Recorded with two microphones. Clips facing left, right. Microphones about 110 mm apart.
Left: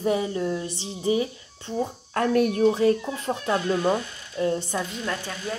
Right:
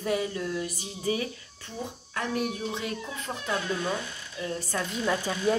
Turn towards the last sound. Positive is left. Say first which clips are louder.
# right 4 dB
turn(degrees=-15)  # may be behind; listen again after turning